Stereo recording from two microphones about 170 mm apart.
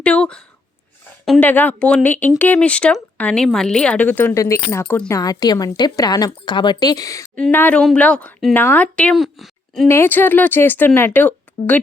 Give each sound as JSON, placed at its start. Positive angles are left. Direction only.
{"t": 0.0, "sound": "speech", "side_deg": 5}
{"t": 7.3, "sound": "speech", "side_deg": 10}
{"t": 9.8, "sound": "speech", "side_deg": 15}